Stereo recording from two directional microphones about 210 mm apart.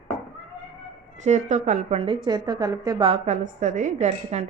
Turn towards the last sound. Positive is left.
turn(degrees=-30)  # may be behind; listen again after turning